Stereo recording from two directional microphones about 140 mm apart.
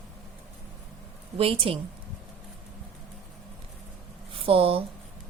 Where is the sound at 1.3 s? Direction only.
40° right (ahead or behind).